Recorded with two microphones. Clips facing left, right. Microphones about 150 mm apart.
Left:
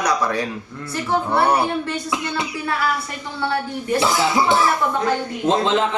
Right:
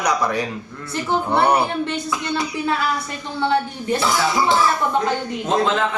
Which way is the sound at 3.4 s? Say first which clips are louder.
Right 3 dB; 20° right (ahead or behind).